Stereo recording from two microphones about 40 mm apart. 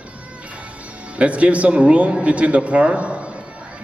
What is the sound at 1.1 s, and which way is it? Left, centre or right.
Speech, right.